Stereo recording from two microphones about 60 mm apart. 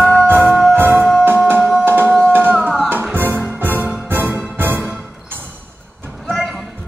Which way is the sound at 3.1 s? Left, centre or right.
Right.